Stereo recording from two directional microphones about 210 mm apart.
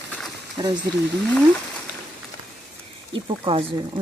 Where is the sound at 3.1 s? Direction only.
25° right (ahead or behind).